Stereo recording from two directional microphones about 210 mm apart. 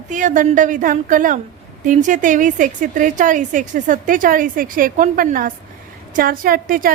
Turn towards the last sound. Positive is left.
turn(degrees=-40)  # may be behind; listen again after turning